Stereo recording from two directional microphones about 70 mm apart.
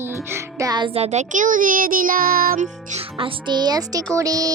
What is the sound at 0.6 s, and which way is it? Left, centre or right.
Music, right.